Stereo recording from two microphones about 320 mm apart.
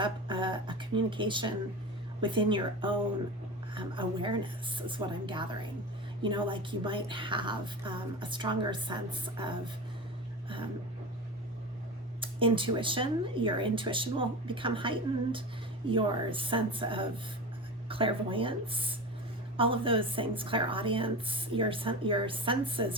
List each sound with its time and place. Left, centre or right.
0.0 s speech: centre
12.2 s speech: centre